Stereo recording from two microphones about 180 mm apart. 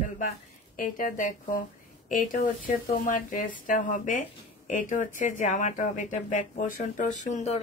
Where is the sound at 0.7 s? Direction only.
50° left (ahead or behind).